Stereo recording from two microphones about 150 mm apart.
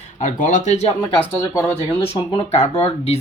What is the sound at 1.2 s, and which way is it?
Speech, 15° left (ahead or behind).